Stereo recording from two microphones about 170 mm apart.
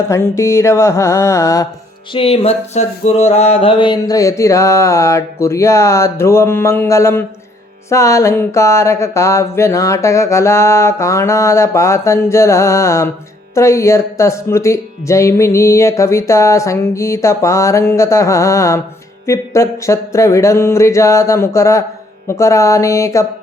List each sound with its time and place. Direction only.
0.1 s speech: 15° left (ahead or behind)
2.1 s speech: 35° left (ahead or behind); by 23.2 s 15° left (ahead or behind)